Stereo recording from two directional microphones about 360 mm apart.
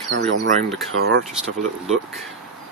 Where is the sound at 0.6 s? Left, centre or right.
Centre.